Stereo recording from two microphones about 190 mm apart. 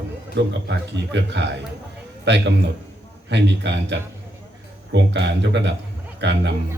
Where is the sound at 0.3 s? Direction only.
65° right (ahead or behind).